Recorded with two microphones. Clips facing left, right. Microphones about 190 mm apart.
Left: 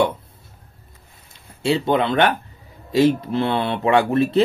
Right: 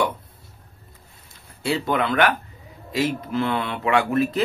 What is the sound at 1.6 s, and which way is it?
Speech, 25° left (ahead or behind).